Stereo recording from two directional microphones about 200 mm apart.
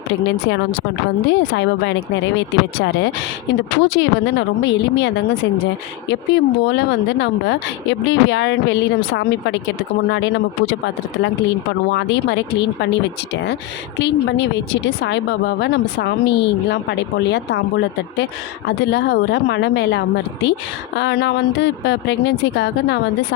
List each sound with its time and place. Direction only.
0.3 s speech: 60° left (ahead or behind)
11.9 s speech: 60° left (ahead or behind)